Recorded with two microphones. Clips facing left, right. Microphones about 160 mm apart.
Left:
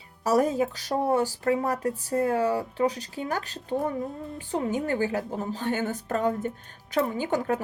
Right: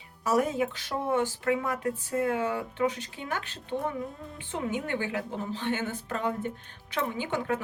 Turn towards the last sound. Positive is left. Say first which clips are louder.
# left 4 dB
turn(degrees=40)  # may be behind; listen again after turning